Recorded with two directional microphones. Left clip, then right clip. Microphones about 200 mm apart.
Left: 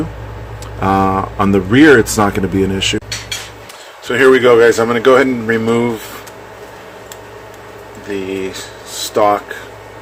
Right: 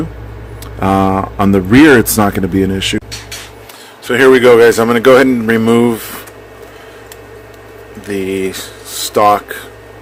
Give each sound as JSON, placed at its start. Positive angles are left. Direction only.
{"t": 0.8, "sound": "speech", "side_deg": -25}
{"t": 4.0, "sound": "a man's voice", "side_deg": -40}
{"t": 8.1, "sound": "a man's voice", "side_deg": -50}